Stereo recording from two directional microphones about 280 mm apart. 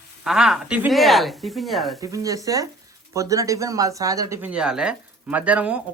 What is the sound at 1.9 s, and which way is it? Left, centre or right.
Speech, centre.